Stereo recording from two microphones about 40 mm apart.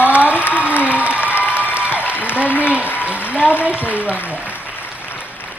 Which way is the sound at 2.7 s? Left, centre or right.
Right.